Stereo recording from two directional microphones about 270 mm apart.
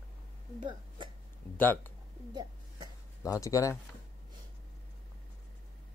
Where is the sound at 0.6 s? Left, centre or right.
Centre.